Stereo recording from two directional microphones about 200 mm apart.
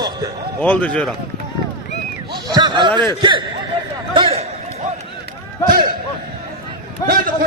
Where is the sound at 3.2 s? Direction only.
25° right (ahead or behind).